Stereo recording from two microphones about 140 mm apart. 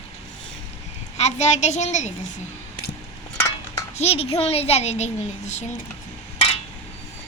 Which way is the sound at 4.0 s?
45° left (ahead or behind).